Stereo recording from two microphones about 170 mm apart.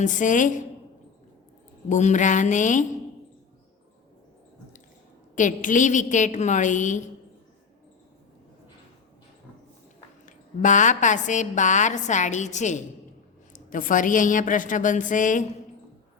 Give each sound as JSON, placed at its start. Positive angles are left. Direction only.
{"t": 0.0, "sound": "a woman's voice", "side_deg": 50}
{"t": 1.9, "sound": "a woman's voice", "side_deg": 45}
{"t": 5.3, "sound": "a woman's voice", "side_deg": 50}
{"t": 10.2, "sound": "a woman's voice", "side_deg": 50}